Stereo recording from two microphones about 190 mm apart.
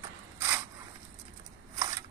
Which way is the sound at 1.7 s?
20° right (ahead or behind).